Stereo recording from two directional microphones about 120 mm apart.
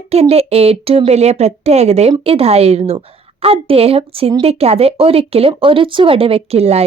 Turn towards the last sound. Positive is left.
turn(degrees=-60)  # may be behind; listen again after turning